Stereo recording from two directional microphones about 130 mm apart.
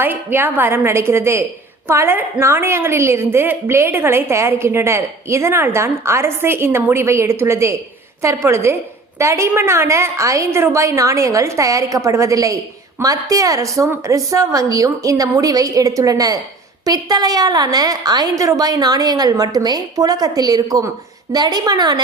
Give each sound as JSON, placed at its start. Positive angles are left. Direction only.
{"t": 0.0, "sound": "a woman's voice", "side_deg": -15}